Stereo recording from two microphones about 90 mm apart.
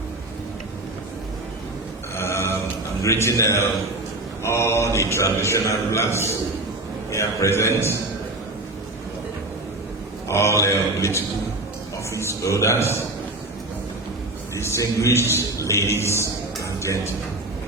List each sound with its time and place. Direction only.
2.1 s a sound: 30° left (ahead or behind)
3.0 s a man's voice: 35° left (ahead or behind)
10.2 s a man's voice: 30° left (ahead or behind)
14.5 s a man's voice: 30° left (ahead or behind)